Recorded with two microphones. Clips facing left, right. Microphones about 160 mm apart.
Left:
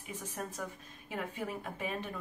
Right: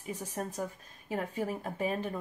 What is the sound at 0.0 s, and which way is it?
A woman's voice, 40° right (ahead or behind).